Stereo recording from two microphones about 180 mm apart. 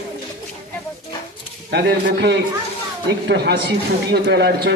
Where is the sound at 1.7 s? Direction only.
70° right (ahead or behind).